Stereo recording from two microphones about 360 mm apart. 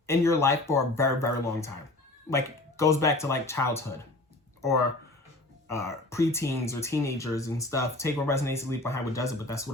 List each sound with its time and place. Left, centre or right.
0.1 s speech: centre
5.6 s speech: centre